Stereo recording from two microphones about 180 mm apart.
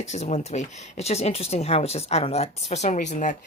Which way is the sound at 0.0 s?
40° left (ahead or behind).